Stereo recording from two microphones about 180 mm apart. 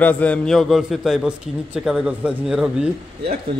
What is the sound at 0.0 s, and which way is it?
A man's voice, 10° left (ahead or behind).